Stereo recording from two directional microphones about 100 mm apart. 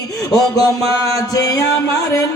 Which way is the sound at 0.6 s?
35° left (ahead or behind).